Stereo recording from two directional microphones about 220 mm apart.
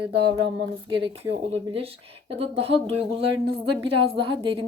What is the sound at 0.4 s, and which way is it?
A woman's voice, 20° right (ahead or behind).